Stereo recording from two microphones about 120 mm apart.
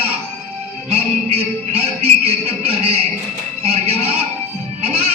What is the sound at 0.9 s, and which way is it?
Music, 55° right (ahead or behind).